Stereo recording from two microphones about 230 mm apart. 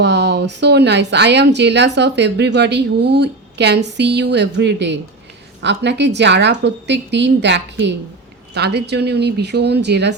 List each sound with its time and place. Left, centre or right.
0.0 s speech: right